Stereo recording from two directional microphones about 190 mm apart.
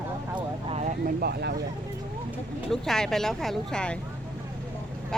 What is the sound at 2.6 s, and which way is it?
Speech, centre (ahead or behind).